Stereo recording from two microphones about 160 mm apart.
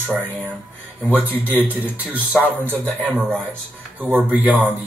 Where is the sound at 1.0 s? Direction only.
10° right (ahead or behind).